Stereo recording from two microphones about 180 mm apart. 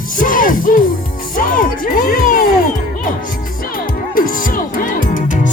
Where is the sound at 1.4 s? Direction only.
50° left (ahead or behind).